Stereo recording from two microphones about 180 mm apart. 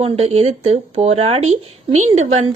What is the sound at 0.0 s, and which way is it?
Speech, 35° right (ahead or behind).